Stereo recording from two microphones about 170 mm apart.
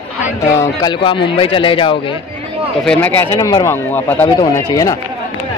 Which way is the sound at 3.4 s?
20° left (ahead or behind).